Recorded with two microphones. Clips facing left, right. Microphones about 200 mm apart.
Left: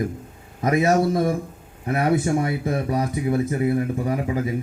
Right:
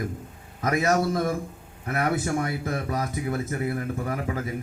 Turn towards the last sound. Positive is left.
turn(degrees=20)  # may be behind; listen again after turning